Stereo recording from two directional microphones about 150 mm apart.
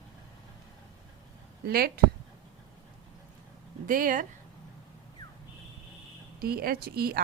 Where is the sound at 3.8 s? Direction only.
65° right (ahead or behind).